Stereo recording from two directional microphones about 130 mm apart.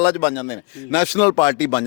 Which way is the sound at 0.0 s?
15° left (ahead or behind).